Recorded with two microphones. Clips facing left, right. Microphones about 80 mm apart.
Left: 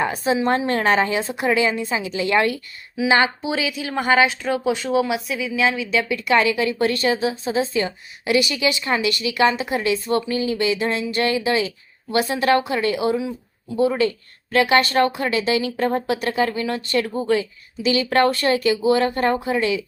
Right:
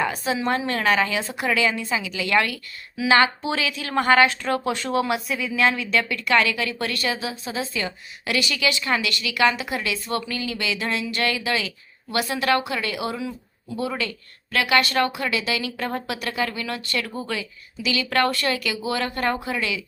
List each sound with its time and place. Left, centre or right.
0.0 s speech: left
3.4 s speech: centre; by 19.8 s left